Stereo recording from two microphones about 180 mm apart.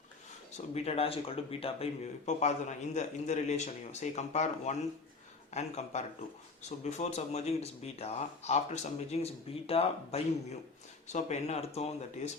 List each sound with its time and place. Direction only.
0.7 s speech: 35° left (ahead or behind)